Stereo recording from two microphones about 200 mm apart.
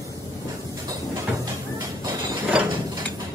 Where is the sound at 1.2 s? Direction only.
15° right (ahead or behind).